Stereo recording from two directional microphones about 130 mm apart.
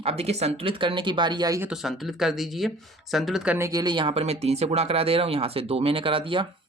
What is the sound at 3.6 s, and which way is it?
Speech, 25° right (ahead or behind).